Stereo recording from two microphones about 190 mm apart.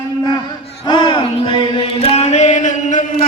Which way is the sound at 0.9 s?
25° left (ahead or behind).